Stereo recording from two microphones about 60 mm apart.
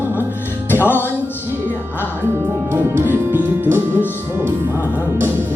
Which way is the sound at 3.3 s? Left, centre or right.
Right.